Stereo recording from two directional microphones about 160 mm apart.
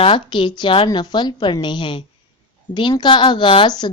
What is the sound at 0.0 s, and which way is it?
A woman's voice, 30° left (ahead or behind).